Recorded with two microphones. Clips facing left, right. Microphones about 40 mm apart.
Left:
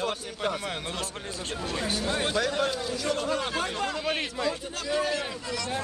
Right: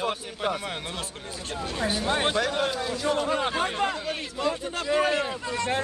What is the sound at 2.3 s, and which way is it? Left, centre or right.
A man's voice, centre.